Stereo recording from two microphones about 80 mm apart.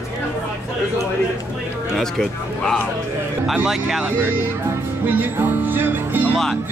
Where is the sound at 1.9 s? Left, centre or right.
Centre.